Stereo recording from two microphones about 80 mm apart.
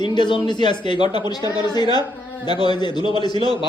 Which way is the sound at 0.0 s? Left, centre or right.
Left.